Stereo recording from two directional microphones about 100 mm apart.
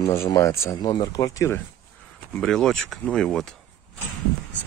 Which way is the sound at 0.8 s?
40° left (ahead or behind).